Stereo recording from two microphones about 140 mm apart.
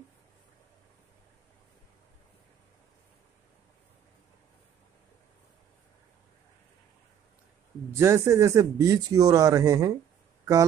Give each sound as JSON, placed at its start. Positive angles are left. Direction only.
{"t": 8.0, "sound": "speech", "side_deg": -20}